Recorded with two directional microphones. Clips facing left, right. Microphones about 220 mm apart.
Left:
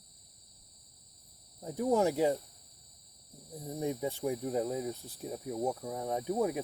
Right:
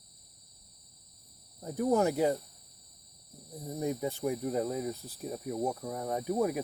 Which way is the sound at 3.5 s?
15° left (ahead or behind).